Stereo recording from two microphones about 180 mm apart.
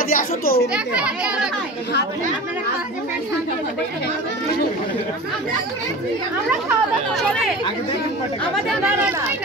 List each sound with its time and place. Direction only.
0.1 s a child's voice: 55° left (ahead or behind)
0.9 s a child's voice: 5° right (ahead or behind)